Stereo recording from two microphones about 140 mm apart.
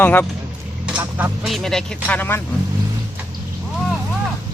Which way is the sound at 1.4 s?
Centre (ahead or behind).